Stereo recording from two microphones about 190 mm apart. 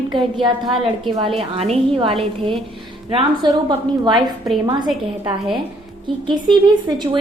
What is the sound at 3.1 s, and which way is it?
A woman's voice, 20° right (ahead or behind).